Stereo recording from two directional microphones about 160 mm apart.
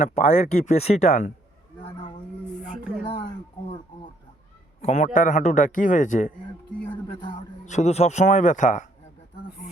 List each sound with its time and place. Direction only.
0.0 s a man's voice: 45° left (ahead or behind)
4.8 s a man's voice: 45° left (ahead or behind)
7.6 s a man's voice: 45° left (ahead or behind)